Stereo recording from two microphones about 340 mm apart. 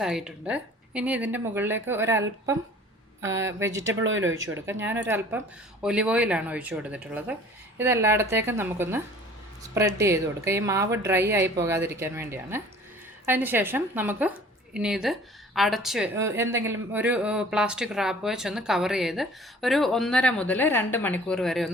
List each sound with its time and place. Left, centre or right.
0.0 s a woman's voice: centre
3.8 s speech: right
4.5 s a woman's voice: centre